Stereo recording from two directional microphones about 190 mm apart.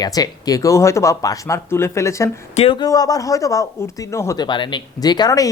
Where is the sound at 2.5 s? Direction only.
25° left (ahead or behind).